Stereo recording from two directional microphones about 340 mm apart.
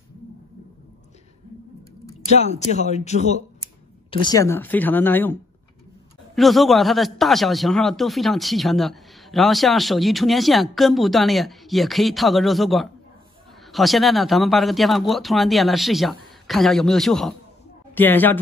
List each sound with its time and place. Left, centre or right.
2.3 s a man's voice: centre